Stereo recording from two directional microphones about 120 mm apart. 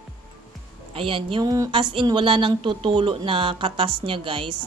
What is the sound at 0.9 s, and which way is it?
A woman's voice, 45° right (ahead or behind).